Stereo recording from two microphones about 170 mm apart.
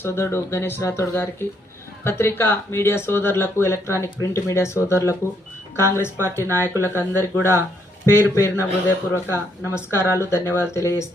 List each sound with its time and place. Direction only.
0.0 s speech: 15° left (ahead or behind)
6.4 s speech: 15° right (ahead or behind)
8.0 s speech: 15° left (ahead or behind)